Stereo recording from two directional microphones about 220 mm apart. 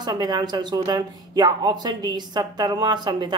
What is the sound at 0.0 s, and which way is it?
A woman's voice, 20° right (ahead or behind).